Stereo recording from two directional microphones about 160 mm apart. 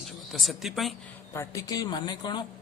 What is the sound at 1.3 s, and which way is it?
Speech, 20° left (ahead or behind).